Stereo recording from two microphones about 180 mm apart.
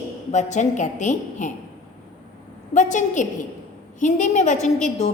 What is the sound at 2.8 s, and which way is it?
A woman's voice, 45° left (ahead or behind).